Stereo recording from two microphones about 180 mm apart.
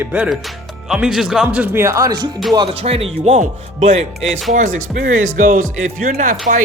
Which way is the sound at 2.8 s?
35° right (ahead or behind).